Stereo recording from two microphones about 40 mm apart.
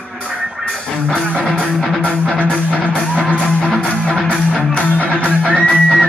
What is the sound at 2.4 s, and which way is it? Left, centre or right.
Music, left.